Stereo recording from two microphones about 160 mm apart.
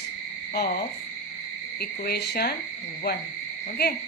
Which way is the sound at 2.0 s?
80° left.